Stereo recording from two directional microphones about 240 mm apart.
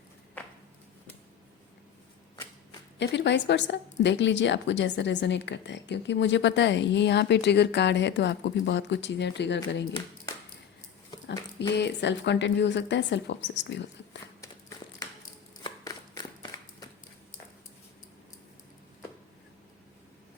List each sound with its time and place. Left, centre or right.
3.0 s a woman's voice: left
11.7 s a woman's voice: left
15.6 s a sound: centre